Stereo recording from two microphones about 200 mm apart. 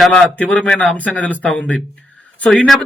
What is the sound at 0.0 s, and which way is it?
A man's voice, 5° left (ahead or behind).